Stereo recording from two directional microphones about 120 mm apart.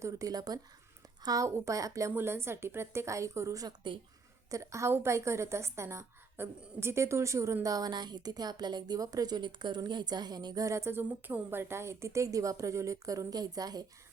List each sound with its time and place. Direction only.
0.0 s a woman's voice: 25° right (ahead or behind)